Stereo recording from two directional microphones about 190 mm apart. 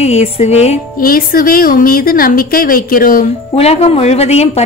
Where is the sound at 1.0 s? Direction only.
50° left (ahead or behind).